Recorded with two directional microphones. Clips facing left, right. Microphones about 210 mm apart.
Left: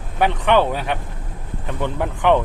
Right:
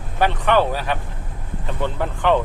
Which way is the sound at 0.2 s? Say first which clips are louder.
Left 1 dB; 20° left (ahead or behind).